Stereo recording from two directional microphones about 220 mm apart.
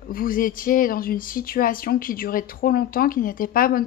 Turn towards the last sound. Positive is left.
turn(degrees=40)  # may be behind; listen again after turning